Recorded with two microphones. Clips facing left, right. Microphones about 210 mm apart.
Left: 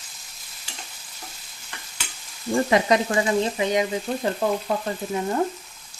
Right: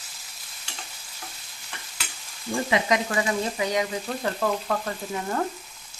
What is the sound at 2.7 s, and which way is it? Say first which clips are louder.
Frying: left 3 dB; 35° left (ahead or behind).